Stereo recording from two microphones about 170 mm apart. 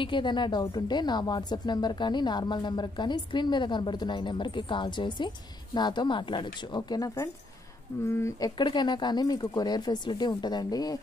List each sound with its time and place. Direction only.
0.0 s a woman's voice: 30° left (ahead or behind)